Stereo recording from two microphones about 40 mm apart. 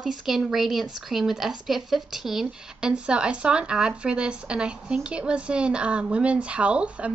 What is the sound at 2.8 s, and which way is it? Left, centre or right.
Speech, right.